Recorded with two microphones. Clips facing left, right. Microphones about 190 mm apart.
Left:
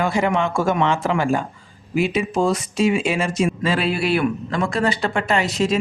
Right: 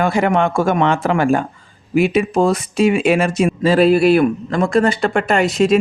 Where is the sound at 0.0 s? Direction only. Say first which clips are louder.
Right 4 dB; 55° right (ahead or behind).